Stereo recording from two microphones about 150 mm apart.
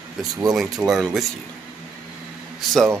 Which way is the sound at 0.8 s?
Centre (ahead or behind).